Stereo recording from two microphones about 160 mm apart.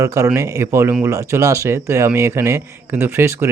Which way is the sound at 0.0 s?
20° right (ahead or behind).